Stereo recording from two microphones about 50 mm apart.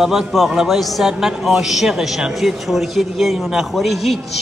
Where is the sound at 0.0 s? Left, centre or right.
Centre.